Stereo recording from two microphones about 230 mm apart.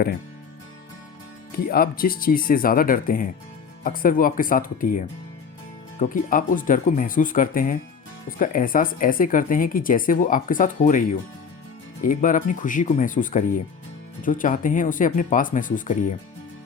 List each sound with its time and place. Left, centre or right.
1.5 s speech: left
12.0 s speech: left